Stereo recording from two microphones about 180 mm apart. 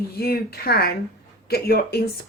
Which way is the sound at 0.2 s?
60° left (ahead or behind).